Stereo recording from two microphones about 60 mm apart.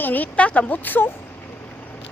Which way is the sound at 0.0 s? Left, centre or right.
Left.